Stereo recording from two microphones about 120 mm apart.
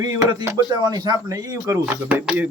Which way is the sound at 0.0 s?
35° right (ahead or behind).